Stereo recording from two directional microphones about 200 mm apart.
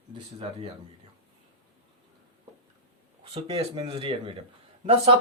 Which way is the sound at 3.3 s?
30° right (ahead or behind).